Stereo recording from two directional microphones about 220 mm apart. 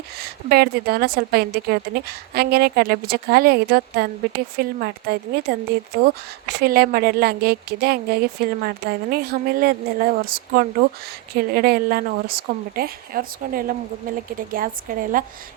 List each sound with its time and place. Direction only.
0.2 s a woman's voice: 45° right (ahead or behind)